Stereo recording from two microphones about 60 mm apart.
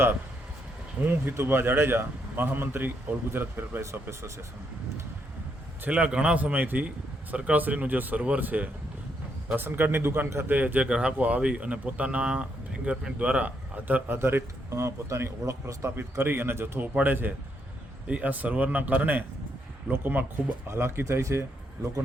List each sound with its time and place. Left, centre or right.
1.0 s speech: right
1.3 s speech: right
5.9 s a man's voice: centre
6.4 s speech: right
10.5 s speech: right
10.8 s a man's voice: centre
14.2 s a man's voice: right
16.8 s speech: right
20.7 s a man's voice: right